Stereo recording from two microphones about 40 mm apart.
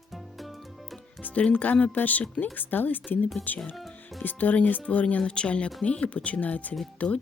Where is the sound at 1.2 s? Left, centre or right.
Left.